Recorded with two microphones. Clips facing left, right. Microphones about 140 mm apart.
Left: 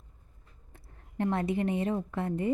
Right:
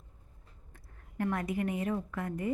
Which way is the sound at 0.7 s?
25° left (ahead or behind).